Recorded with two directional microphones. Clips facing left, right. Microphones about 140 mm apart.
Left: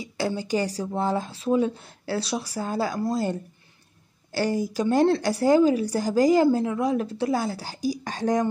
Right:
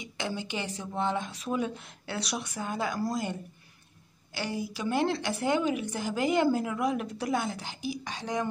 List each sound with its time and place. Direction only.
0.0 s a woman's voice: 35° left (ahead or behind)
4.3 s a woman's voice: 40° left (ahead or behind)